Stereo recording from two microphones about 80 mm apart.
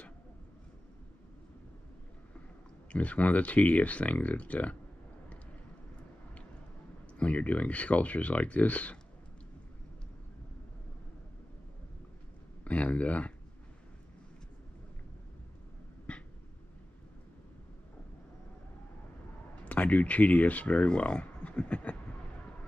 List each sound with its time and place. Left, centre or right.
2.9 s speech: centre
7.2 s speech: centre
12.6 s speech: centre
19.6 s speech: centre